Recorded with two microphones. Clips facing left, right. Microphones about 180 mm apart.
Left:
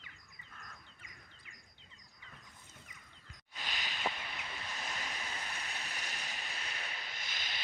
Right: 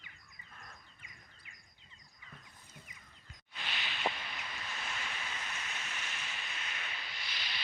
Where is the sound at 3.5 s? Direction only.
40° left (ahead or behind).